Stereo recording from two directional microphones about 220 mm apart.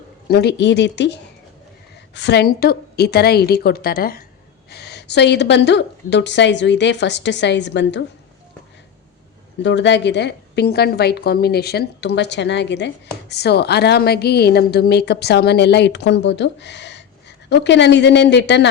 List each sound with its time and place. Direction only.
0.3 s a woman's voice: 45° left (ahead or behind)
2.1 s a woman's voice: 50° left (ahead or behind)
9.6 s a woman's voice: 50° left (ahead or behind)